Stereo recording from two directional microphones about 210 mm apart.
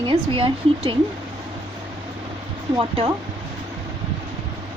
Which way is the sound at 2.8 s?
25° right (ahead or behind).